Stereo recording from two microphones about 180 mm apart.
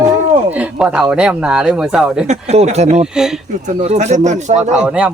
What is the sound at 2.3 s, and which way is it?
Speech, 40° right (ahead or behind).